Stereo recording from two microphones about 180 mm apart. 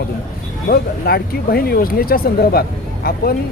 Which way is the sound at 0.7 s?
60° left (ahead or behind).